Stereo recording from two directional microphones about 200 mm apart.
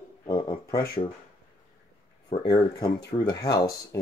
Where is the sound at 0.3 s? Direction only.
15° left (ahead or behind).